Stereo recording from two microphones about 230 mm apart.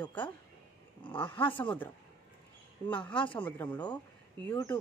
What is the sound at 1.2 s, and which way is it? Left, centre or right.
Speech, left.